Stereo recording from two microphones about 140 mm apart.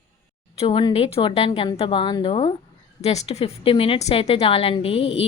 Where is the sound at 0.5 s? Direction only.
45° left (ahead or behind).